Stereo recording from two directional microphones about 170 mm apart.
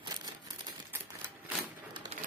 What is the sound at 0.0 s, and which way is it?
Crumpling, 20° right (ahead or behind).